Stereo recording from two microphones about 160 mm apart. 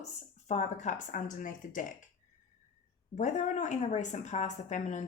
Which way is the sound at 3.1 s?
50° left (ahead or behind).